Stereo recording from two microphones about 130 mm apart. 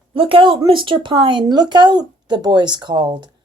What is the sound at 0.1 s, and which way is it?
Speech, 45° right (ahead or behind).